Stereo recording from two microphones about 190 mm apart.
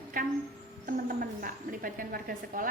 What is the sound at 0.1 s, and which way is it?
A woman's voice, 45° right (ahead or behind).